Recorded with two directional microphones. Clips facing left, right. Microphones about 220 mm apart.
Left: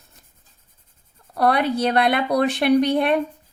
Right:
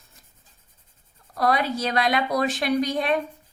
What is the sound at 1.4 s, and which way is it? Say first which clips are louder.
A woman's voice: left 4 dB; 60° left (ahead or behind).